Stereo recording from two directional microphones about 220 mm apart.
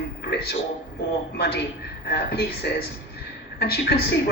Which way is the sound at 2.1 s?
45° left (ahead or behind).